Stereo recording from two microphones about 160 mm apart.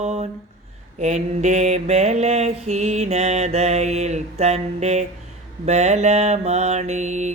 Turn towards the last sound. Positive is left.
turn(degrees=-45)  # may be behind; listen again after turning